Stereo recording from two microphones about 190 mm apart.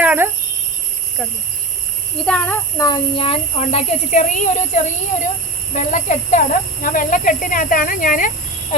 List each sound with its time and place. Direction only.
0.0 s squeal: 10° right (ahead or behind)
2.2 s a child's voice: 5° left (ahead or behind)
2.7 s a child's voice: 20° left (ahead or behind); by 8.3 s 45° left (ahead or behind)